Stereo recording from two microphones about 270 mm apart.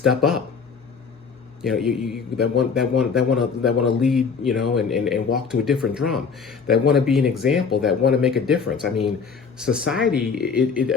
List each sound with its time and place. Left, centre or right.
0.0 s speech: centre
1.6 s speech: centre